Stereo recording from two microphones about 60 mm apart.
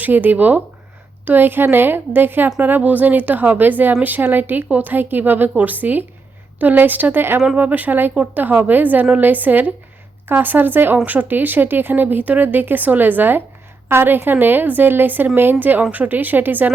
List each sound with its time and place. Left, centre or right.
0.0 s speech: right
7.5 s speech: right